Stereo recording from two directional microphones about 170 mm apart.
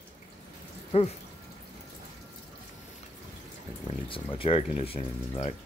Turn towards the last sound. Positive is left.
turn(degrees=35)  # may be behind; listen again after turning